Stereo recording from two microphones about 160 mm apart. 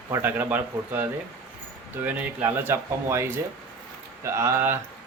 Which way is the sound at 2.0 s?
10° right (ahead or behind).